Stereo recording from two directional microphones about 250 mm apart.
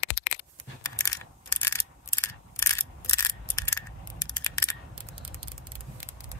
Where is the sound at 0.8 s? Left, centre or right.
Centre.